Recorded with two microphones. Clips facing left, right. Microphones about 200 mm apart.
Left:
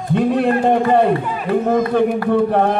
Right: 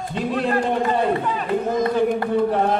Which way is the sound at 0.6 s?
60° left (ahead or behind).